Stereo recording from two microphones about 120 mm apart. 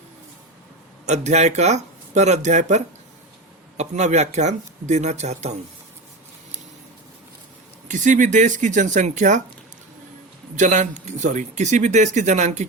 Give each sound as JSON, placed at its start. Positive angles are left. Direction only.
{"t": 1.0, "sound": "speech", "side_deg": -70}
{"t": 7.9, "sound": "speech", "side_deg": -90}
{"t": 10.5, "sound": "speech", "side_deg": -90}